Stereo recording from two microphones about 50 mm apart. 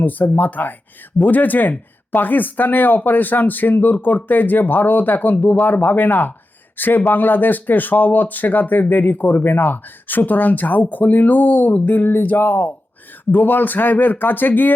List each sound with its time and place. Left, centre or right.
0.0 s speech: left